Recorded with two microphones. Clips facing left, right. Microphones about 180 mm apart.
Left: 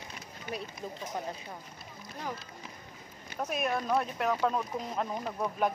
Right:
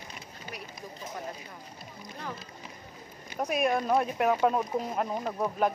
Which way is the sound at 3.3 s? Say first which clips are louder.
Right 4 dB; 10° right (ahead or behind).